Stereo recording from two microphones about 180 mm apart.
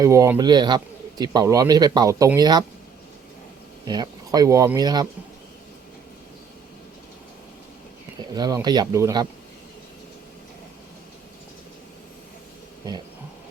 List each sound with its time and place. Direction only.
0.0 s speech: 20° right (ahead or behind)
3.8 s speech: 20° right (ahead or behind)
8.4 s speech: 20° right (ahead or behind)